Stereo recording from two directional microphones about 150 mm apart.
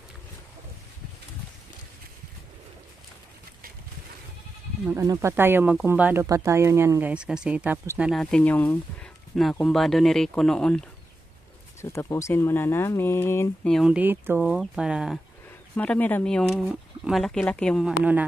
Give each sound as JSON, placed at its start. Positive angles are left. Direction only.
{"t": 4.8, "sound": "speech", "side_deg": -20}
{"t": 8.1, "sound": "speech", "side_deg": 5}
{"t": 11.8, "sound": "speech", "side_deg": 20}
{"t": 13.7, "sound": "speech", "side_deg": 0}
{"t": 13.9, "sound": "speech", "side_deg": -15}
{"t": 15.7, "sound": "speech", "side_deg": 10}
{"t": 17.8, "sound": "speech", "side_deg": -10}